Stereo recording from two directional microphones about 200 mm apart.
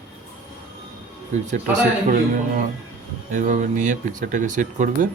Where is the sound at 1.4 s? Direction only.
40° right (ahead or behind).